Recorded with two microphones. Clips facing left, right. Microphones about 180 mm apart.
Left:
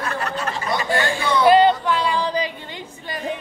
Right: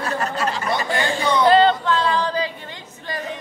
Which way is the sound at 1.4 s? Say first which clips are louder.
Left 1 dB; 10° left (ahead or behind).